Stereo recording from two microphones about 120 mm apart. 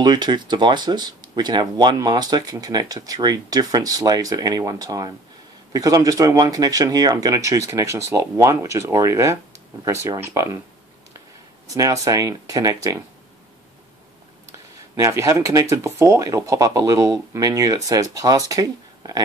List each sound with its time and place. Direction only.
0.0 s speech: 35° right (ahead or behind)
11.6 s speech: 25° right (ahead or behind)
15.0 s speech: 25° right (ahead or behind)